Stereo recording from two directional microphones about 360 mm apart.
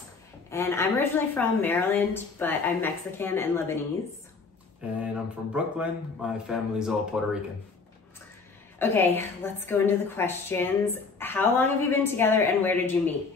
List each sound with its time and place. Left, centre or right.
0.5 s a woman's voice: centre
5.0 s a woman's voice: centre
8.7 s a woman's voice: centre